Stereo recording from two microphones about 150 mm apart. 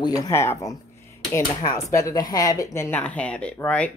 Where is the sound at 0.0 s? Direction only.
25° left (ahead or behind).